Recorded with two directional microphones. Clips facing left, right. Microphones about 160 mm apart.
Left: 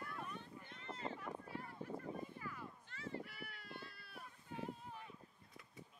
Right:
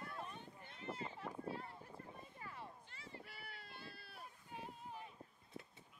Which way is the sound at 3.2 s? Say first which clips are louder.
Left 2 dB; 30° right (ahead or behind).